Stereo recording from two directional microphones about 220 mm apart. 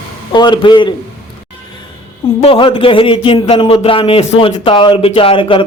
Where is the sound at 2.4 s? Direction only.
25° left (ahead or behind).